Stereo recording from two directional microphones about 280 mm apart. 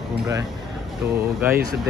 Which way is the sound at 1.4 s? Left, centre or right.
Centre.